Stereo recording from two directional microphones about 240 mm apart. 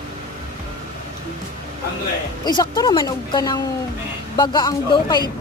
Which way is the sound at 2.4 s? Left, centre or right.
Centre.